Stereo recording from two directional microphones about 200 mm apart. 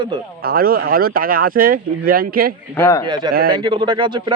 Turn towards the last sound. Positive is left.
turn(degrees=-25)  # may be behind; listen again after turning